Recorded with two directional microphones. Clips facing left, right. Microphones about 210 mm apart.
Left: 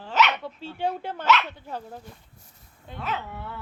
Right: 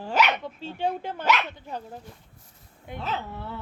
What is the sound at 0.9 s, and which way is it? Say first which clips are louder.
Music: left 2 dB; 10° right (ahead or behind).